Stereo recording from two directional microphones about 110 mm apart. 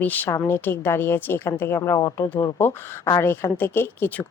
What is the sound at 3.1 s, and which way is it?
A woman's voice, 20° left (ahead or behind).